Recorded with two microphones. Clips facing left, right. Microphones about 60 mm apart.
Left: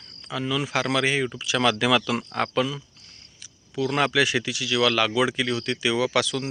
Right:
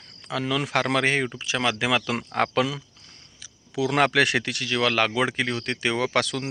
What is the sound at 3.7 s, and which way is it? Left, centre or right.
Speech, right.